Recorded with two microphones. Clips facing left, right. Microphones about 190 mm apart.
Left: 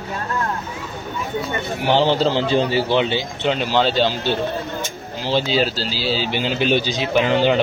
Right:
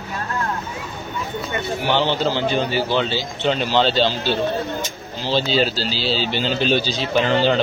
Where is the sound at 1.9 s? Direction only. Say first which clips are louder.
Left 4 dB; 35° left (ahead or behind).